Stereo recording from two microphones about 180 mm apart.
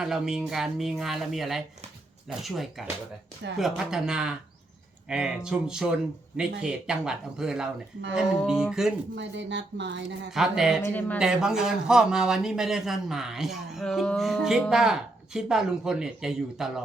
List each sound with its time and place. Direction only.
0.0 s speech: 5° right (ahead or behind)
9.1 s speech: 85° right
10.3 s speech: 5° right (ahead or behind)